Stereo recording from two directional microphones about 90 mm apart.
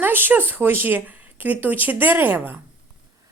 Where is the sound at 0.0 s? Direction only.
20° right (ahead or behind).